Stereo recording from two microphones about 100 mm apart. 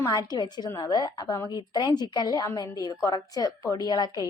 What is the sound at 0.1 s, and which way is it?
A woman's voice, 45° left (ahead or behind).